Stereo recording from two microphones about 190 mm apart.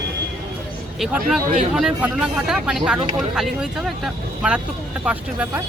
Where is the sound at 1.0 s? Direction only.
Centre (ahead or behind).